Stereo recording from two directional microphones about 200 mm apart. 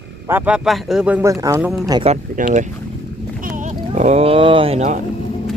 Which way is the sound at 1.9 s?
25° right (ahead or behind).